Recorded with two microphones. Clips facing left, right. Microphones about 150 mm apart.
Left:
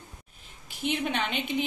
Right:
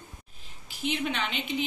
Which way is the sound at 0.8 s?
55° left (ahead or behind).